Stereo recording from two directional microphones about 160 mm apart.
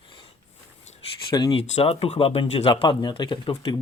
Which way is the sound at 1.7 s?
40° left (ahead or behind).